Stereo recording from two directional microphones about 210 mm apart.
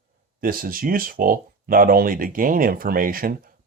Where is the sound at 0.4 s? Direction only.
45° right (ahead or behind).